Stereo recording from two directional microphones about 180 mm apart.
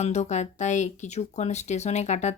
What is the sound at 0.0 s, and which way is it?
Speech, 40° left (ahead or behind).